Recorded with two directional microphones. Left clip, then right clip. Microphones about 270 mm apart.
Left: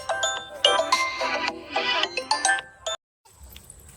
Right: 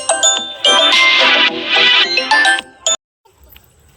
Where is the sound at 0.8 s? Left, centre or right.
Right.